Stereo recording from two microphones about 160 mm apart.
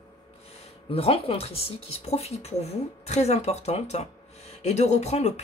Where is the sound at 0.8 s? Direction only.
35° left (ahead or behind).